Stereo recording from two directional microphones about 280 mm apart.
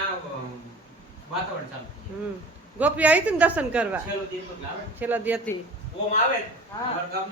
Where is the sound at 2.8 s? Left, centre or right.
Centre.